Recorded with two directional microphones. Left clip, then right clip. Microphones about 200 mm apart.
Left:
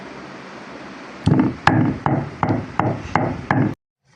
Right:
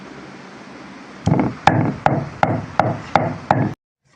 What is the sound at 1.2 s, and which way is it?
Chop, 5° right (ahead or behind).